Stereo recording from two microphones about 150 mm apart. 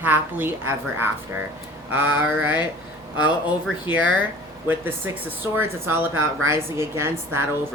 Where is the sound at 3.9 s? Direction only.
10° right (ahead or behind).